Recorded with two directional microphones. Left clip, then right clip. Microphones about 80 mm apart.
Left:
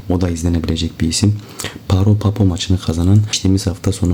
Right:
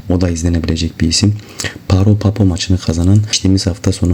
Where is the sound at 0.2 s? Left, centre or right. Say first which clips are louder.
Right 2 dB; right.